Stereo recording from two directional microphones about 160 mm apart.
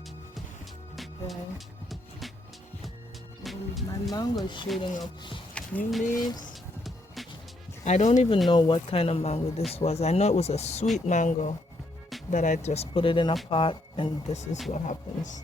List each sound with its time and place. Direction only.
0.9 s music: centre (ahead or behind)
3.4 s speech: centre (ahead or behind)
4.1 s speech: 25° left (ahead or behind)
5.5 s speech: 5° left (ahead or behind)
7.9 s speech: 45° left (ahead or behind)
8.4 s speech: 30° left (ahead or behind); by 15.4 s 50° left (ahead or behind)